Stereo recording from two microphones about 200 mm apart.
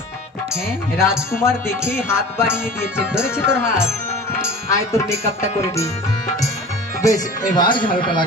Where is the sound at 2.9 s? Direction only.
5° right (ahead or behind).